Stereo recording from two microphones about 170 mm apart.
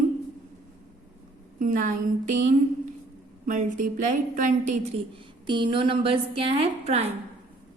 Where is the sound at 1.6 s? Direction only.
50° right (ahead or behind).